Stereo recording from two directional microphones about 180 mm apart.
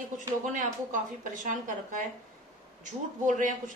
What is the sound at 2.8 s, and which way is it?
Speech, 45° right (ahead or behind).